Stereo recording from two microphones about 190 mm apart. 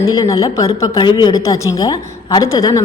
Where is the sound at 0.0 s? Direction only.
20° left (ahead or behind).